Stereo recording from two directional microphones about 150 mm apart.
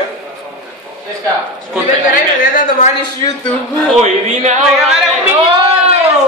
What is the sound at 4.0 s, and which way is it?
Speech, 50° right (ahead or behind).